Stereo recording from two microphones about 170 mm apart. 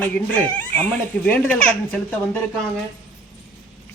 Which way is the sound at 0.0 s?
10° left (ahead or behind).